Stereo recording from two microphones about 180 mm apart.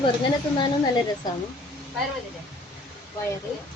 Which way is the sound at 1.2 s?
25° left (ahead or behind).